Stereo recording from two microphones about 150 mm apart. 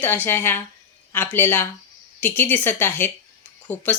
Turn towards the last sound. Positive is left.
turn(degrees=10)  # may be behind; listen again after turning